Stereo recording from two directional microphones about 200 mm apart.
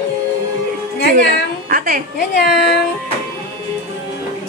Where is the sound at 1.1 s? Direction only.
45° right (ahead or behind).